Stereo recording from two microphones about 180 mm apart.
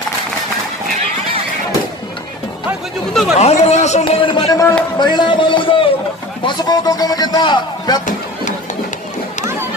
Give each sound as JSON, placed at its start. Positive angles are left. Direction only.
{"t": 3.1, "sound": "speech", "side_deg": 0}
{"t": 3.3, "sound": "a man's voice", "side_deg": 35}